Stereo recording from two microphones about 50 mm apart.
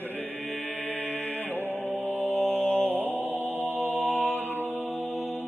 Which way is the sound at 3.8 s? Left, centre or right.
Left.